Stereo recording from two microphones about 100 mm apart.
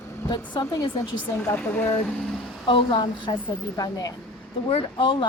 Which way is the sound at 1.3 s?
20° left (ahead or behind).